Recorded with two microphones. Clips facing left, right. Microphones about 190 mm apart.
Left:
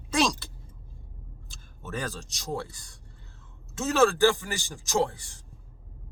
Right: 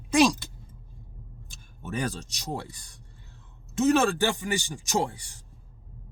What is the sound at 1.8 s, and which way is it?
Speech, 15° right (ahead or behind).